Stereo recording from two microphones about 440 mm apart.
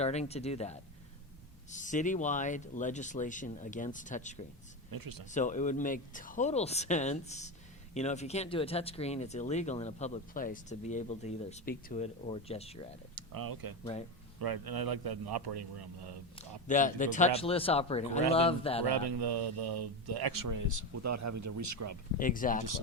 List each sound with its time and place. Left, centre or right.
0.0 s speech: centre
4.9 s speech: right
5.3 s speech: centre
13.1 s a man's voice: right
16.6 s speech: centre
18.9 s speech: right
22.2 s speech: centre